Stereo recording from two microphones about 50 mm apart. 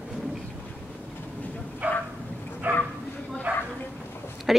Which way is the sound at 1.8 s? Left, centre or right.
Right.